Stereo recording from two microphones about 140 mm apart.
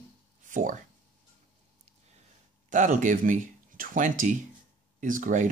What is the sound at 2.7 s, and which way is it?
Speech, 65° right (ahead or behind).